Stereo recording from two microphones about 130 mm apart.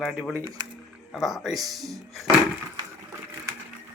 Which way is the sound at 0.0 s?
Centre (ahead or behind).